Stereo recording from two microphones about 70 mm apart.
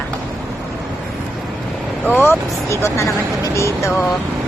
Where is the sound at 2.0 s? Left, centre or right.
Left.